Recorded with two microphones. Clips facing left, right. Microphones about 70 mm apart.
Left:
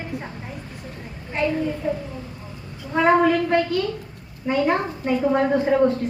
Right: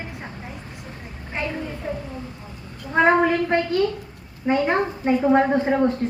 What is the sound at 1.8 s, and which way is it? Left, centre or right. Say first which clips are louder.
Speech: left 2 dB; centre.